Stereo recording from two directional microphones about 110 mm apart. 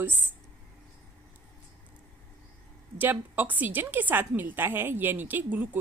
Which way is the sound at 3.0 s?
20° right (ahead or behind).